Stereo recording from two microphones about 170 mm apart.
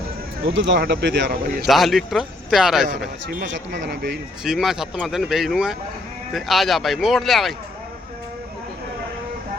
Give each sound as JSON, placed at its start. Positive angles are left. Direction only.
{"t": 0.5, "sound": "speech", "side_deg": -90}
{"t": 1.6, "sound": "speech", "side_deg": 0}
{"t": 3.2, "sound": "speech", "side_deg": -90}
{"t": 4.4, "sound": "speech", "side_deg": 0}